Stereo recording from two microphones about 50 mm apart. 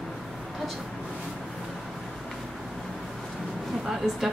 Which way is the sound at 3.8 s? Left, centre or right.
Centre.